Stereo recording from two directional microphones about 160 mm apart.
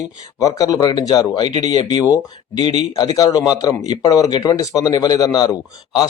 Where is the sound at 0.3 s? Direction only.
20° left (ahead or behind).